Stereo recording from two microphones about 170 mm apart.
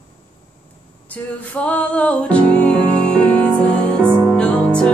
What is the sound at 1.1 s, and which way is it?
Music, 10° left (ahead or behind).